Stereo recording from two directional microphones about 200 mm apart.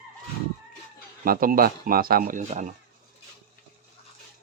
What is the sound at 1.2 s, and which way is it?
Speech, 45° right (ahead or behind).